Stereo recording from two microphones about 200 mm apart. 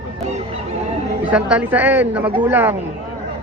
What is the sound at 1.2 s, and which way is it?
A man's voice, 5° right (ahead or behind).